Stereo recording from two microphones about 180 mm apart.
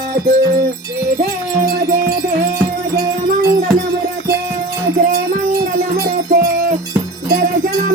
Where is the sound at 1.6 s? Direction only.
55° right (ahead or behind).